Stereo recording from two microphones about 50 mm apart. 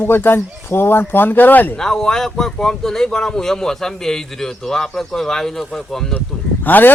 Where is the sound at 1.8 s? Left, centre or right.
Centre.